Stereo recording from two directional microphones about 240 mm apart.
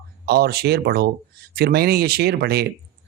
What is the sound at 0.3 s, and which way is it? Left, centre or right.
Speech, right.